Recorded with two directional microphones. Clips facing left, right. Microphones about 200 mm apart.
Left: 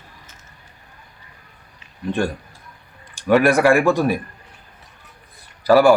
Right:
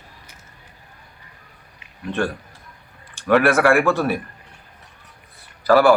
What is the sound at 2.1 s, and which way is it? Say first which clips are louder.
Speech: left 2 dB; 15° left (ahead or behind).